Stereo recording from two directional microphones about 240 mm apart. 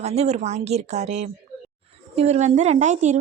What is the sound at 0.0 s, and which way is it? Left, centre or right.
A woman's voice, right.